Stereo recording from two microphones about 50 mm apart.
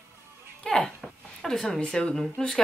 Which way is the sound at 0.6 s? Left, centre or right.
Centre.